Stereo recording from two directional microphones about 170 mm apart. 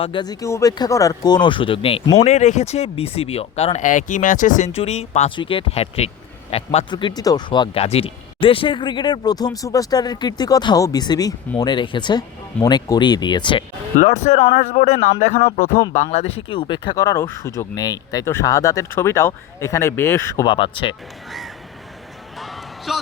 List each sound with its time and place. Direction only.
0.0 s speech: 25° left (ahead or behind)
7.2 s speech: 25° left (ahead or behind)
13.9 s speech: 45° left (ahead or behind); by 20.9 s 30° left (ahead or behind)
21.2 s crow: centre (ahead or behind)
22.4 s a sound: centre (ahead or behind)